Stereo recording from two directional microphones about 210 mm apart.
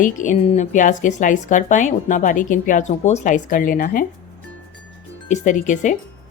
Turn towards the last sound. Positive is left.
turn(degrees=35)  # may be behind; listen again after turning